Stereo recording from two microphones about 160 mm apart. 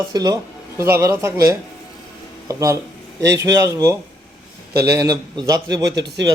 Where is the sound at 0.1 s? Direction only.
25° right (ahead or behind).